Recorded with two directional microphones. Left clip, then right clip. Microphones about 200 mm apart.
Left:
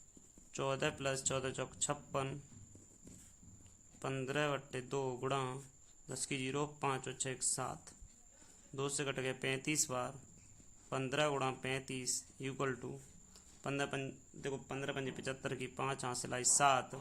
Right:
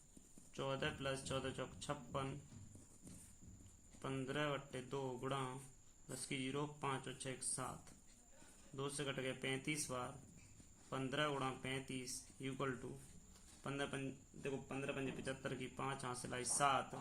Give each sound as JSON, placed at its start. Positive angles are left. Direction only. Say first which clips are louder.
{"t": 0.5, "sound": "a man's voice", "louder": "left 6 dB", "side_deg": 45}
{"t": 4.0, "sound": "a man's voice", "louder": "left 6 dB", "side_deg": 45}